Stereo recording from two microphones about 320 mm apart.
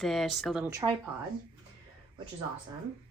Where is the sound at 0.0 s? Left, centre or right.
Centre.